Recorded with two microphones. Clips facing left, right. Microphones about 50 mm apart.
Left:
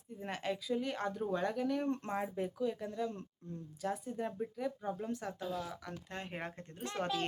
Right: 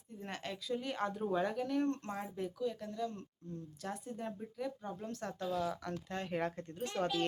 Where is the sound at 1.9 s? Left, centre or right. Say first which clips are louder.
Left 4 dB; left.